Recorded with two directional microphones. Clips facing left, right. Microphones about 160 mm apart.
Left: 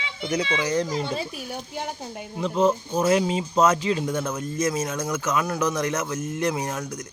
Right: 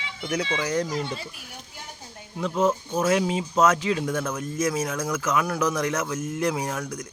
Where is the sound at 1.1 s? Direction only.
90° left.